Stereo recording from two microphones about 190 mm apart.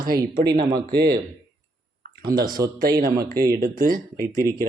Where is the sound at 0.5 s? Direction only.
20° right (ahead or behind).